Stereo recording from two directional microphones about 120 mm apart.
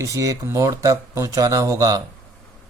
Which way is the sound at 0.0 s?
30° right (ahead or behind).